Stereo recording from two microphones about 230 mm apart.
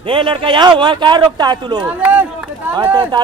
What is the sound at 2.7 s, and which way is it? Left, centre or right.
Speech, centre.